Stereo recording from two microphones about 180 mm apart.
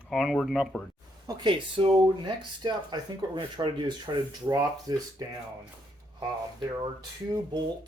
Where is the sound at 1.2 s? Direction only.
25° right (ahead or behind).